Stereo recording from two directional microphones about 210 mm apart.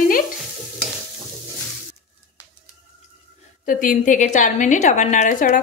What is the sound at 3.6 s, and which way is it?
A woman's voice, 40° left (ahead or behind).